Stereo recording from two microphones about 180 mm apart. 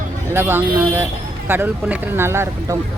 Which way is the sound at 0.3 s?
10° right (ahead or behind).